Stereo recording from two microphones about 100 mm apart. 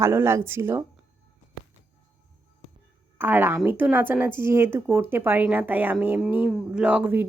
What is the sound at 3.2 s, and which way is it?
Speech, 20° right (ahead or behind).